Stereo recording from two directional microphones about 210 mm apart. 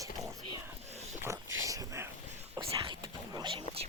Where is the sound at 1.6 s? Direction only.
15° right (ahead or behind).